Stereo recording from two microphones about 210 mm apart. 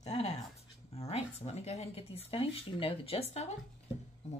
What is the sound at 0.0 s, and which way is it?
Dog, 30° left (ahead or behind).